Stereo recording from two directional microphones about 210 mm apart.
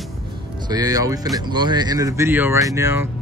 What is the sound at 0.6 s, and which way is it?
Speech, 20° right (ahead or behind).